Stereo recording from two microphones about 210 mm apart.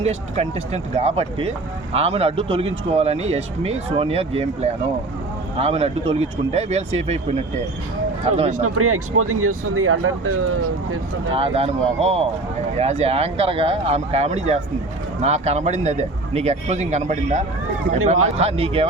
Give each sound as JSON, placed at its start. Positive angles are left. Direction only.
{"t": 0.0, "sound": "speech", "side_deg": -30}
{"t": 8.6, "sound": "speech", "side_deg": -90}
{"t": 11.3, "sound": "speech", "side_deg": -30}